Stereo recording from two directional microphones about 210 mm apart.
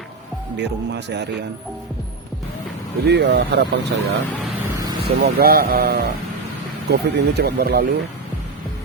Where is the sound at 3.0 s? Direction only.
55° right (ahead or behind).